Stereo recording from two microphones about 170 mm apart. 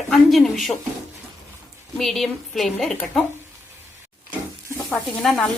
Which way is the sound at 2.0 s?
Centre (ahead or behind).